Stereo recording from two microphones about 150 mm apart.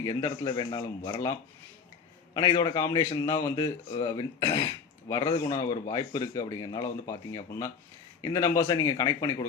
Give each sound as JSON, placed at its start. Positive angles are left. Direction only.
{"t": 0.0, "sound": "speech", "side_deg": 25}